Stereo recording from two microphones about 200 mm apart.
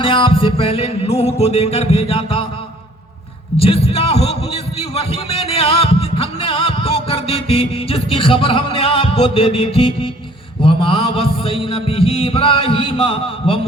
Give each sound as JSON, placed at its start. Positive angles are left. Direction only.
{"t": 0.0, "sound": "a man's voice", "side_deg": 25}
{"t": 3.6, "sound": "a man's voice", "side_deg": 30}